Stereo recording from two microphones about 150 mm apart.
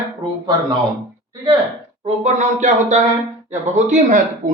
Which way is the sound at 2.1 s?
50° right (ahead or behind).